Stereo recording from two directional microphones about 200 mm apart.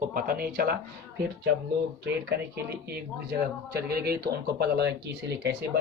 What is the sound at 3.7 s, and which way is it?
Speech, 50° right (ahead or behind).